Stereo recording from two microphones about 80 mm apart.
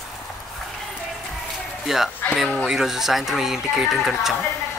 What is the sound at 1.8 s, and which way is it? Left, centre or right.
Speech, centre.